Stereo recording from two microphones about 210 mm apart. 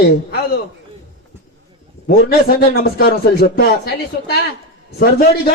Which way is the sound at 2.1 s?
45° left (ahead or behind).